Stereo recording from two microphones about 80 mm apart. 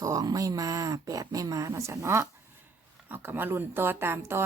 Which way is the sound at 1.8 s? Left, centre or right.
Right.